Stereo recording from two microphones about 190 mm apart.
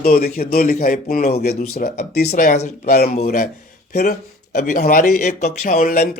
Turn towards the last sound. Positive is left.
turn(degrees=40)  # may be behind; listen again after turning